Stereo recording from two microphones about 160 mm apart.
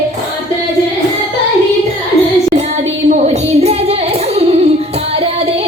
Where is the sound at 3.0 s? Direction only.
45° right (ahead or behind).